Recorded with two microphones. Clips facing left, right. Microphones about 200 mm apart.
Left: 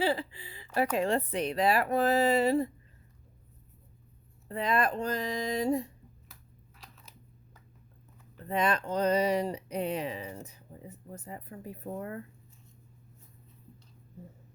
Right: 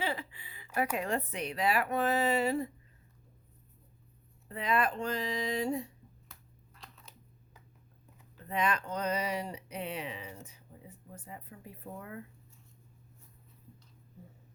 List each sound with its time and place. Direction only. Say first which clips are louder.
0.0 s speech: left 7 dB; 30° left (ahead or behind)
4.4 s speech: left 2 dB; 40° left (ahead or behind)
6.7 s a sound: right 1 dB; 5° left (ahead or behind)
8.4 s speech: left 3 dB; 35° left (ahead or behind)